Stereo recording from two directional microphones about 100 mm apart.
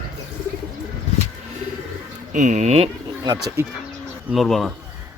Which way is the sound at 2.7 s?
80° right.